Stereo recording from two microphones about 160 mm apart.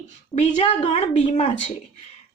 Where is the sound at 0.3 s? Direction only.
45° left (ahead or behind).